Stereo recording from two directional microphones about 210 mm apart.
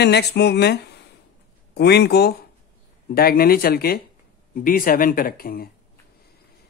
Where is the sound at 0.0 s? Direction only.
50° left (ahead or behind).